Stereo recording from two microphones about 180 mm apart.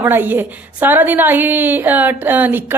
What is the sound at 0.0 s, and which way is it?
A woman's voice, 10° right (ahead or behind).